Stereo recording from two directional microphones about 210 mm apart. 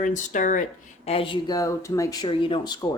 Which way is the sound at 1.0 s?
25° left (ahead or behind).